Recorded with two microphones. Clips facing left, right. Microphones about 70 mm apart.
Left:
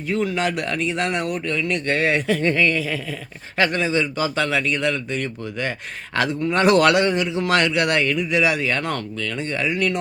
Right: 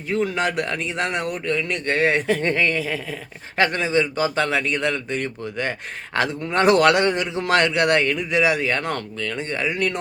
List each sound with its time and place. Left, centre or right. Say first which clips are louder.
0.1 s speech: even; right
6.9 s speech: left 1 dB; right